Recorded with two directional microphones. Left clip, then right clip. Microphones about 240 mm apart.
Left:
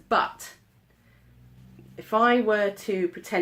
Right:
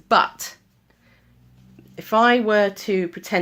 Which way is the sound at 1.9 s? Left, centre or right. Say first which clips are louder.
Right 5 dB; right.